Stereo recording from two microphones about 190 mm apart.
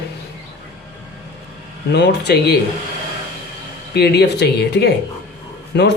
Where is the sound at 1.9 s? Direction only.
65° left (ahead or behind).